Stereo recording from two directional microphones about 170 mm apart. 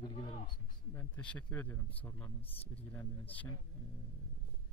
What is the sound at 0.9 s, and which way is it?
A man's voice, 10° left (ahead or behind).